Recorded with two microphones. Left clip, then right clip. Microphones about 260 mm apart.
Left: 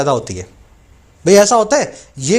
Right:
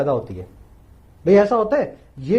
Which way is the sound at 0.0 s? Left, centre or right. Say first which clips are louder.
Left 5 dB; left.